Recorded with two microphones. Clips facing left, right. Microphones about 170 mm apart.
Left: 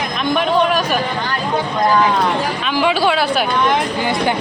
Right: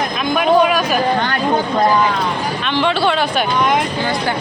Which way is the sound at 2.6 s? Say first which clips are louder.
Even; 5° left (ahead or behind).